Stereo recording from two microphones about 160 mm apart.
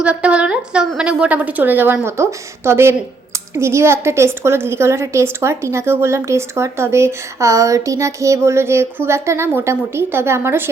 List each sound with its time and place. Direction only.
0.0 s a woman's voice: 10° right (ahead or behind)